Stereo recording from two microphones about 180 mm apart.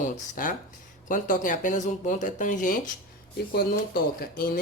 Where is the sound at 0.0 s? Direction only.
45° left (ahead or behind).